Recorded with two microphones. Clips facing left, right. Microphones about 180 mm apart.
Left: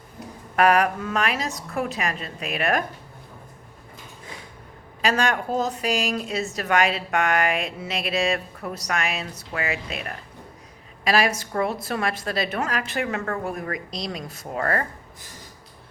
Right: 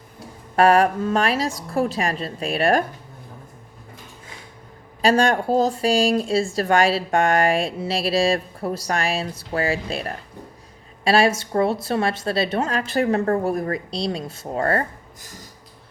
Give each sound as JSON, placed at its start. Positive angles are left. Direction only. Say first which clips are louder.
{"t": 0.5, "sound": "speech", "louder": "right 3 dB", "side_deg": -30}
{"t": 5.0, "sound": "a woman's voice", "louder": "right 5 dB", "side_deg": -30}